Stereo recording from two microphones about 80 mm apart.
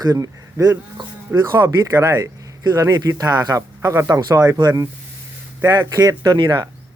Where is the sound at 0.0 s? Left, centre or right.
Right.